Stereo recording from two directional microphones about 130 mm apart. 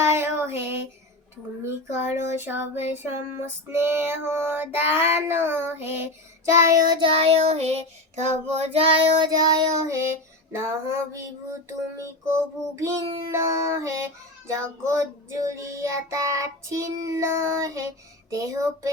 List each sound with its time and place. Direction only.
0.0 s child singing: 20° right (ahead or behind)
7.1 s child singing: 50° right (ahead or behind); by 18.9 s 25° right (ahead or behind)